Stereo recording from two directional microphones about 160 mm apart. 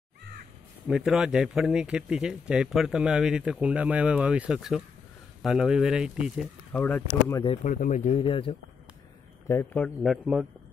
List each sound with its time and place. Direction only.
0.8 s speech: 5° right (ahead or behind)
6.7 s speech: 10° left (ahead or behind)
7.4 s speech: 45° left (ahead or behind)
8.2 s speech: 35° left (ahead or behind)
9.5 s a man's voice: 15° left (ahead or behind)
10.0 s speech: centre (ahead or behind)